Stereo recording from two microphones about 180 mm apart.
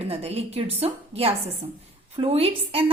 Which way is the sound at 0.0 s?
35° right (ahead or behind).